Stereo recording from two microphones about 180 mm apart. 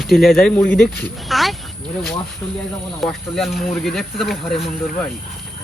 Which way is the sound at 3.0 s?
Centre (ahead or behind).